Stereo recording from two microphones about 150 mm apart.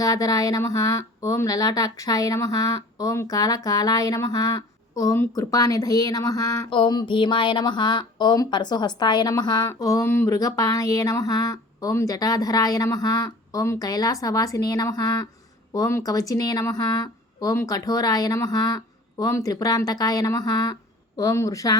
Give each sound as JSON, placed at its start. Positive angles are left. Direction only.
{"t": 0.0, "sound": "speech", "side_deg": 25}